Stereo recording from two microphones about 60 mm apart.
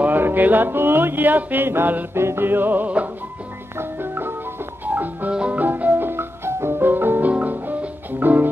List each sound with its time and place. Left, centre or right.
0.0 s music: right
3.7 s music: right
5.3 s music: centre
5.6 s music: right